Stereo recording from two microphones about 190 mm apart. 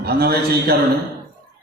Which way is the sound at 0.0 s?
55° right (ahead or behind).